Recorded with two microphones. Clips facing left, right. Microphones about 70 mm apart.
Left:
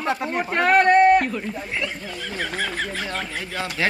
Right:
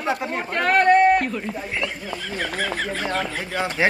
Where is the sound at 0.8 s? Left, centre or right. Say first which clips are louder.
Even; centre.